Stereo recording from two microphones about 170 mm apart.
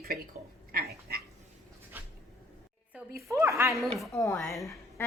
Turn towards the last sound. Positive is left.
turn(degrees=0)  # may be behind; listen again after turning